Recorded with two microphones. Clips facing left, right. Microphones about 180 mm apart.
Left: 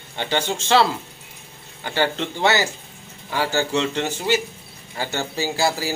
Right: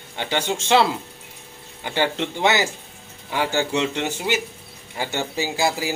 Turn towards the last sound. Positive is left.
turn(degrees=-15)  # may be behind; listen again after turning